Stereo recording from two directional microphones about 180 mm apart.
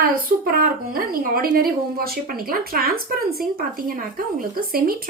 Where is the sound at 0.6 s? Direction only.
55° right (ahead or behind).